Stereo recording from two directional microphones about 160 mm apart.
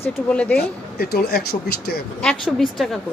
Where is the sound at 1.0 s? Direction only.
75° left (ahead or behind).